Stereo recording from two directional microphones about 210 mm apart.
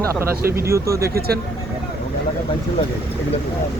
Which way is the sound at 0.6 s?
15° right (ahead or behind).